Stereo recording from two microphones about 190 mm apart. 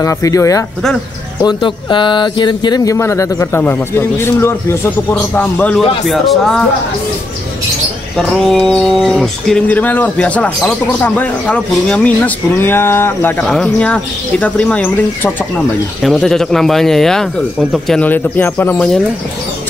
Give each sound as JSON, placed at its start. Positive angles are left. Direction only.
{"t": 0.0, "sound": "speech", "side_deg": 15}
{"t": 8.2, "sound": "speech", "side_deg": 0}